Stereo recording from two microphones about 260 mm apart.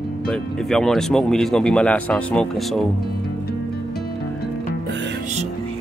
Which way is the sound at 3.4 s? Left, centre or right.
Left.